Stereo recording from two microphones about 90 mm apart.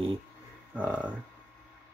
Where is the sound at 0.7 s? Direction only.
15° right (ahead or behind).